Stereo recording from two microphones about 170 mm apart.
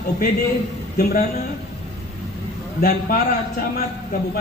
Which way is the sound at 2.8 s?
60° left (ahead or behind).